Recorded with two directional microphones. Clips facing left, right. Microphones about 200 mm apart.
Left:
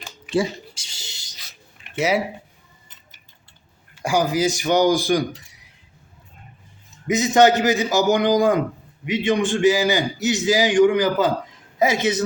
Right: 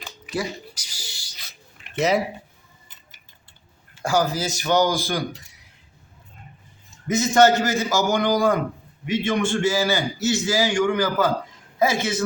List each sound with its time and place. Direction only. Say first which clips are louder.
0.3 s a sound: left 6 dB; 25° left (ahead or behind)
2.0 s a man's voice: even; 10° left (ahead or behind)
4.0 s a man's voice: left 3 dB; 15° left (ahead or behind)
7.1 s a man's voice: left 1 dB; 15° left (ahead or behind)